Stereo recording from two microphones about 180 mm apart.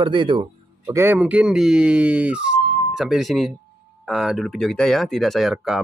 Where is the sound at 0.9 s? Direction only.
10° right (ahead or behind).